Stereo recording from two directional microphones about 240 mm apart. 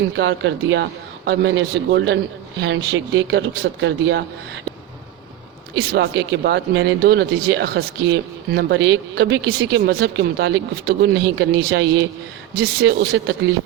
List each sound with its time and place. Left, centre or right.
0.2 s speech: right
5.7 s speech: right